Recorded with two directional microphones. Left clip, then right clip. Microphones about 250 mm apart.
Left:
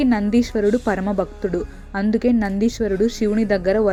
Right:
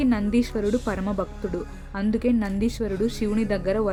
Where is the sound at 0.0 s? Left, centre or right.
Centre.